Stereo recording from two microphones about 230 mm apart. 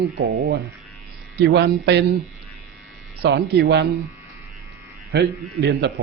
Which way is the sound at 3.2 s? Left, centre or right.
Right.